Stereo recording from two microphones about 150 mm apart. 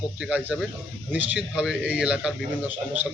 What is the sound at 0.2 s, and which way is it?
A man's voice, 10° right (ahead or behind).